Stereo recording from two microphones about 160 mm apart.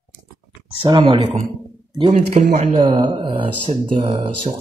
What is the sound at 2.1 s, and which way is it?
Speech, 50° right (ahead or behind).